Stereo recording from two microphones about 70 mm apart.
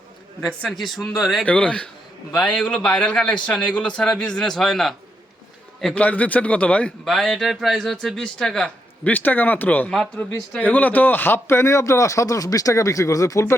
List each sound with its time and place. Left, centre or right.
0.8 s speech: centre
1.5 s a man's voice: centre
5.9 s a man's voice: left
7.0 s a man's voice: centre
9.0 s a man's voice: left